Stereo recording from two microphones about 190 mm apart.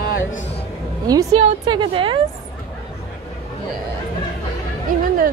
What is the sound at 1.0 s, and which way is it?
A woman's voice, 20° right (ahead or behind).